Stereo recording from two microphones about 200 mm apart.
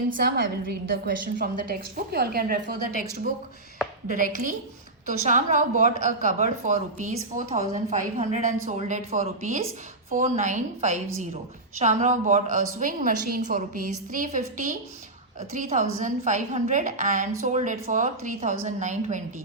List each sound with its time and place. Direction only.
0.2 s a woman's voice: 50° right (ahead or behind)
4.1 s a woman's voice: 40° right (ahead or behind)